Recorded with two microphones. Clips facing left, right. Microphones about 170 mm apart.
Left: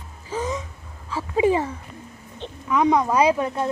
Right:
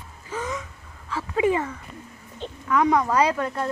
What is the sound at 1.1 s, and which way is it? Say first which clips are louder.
Speech: left 2 dB; 25° left (ahead or behind).